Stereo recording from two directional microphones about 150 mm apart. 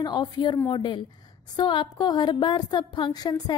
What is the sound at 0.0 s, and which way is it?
A woman's voice, 30° left (ahead or behind).